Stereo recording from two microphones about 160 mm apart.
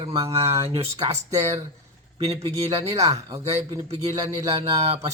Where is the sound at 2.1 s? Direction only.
40° right (ahead or behind).